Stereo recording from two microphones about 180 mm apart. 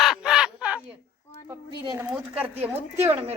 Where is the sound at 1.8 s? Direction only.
20° right (ahead or behind).